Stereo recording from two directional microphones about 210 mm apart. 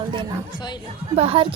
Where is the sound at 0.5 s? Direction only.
20° left (ahead or behind).